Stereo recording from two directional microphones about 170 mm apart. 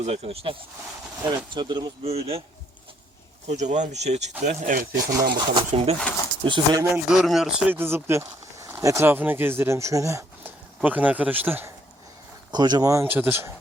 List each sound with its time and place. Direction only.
0.0 s speech: 35° right (ahead or behind)
1.5 s speech: 25° right (ahead or behind)
3.5 s speech: 45° right (ahead or behind)
5.3 s speech: 30° right (ahead or behind)
6.9 s speech: 5° right (ahead or behind)
7.8 s speech: 15° right (ahead or behind)
12.5 s speech: 25° right (ahead or behind)